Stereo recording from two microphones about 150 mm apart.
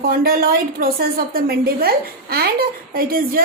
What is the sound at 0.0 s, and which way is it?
A woman's voice, 75° right (ahead or behind).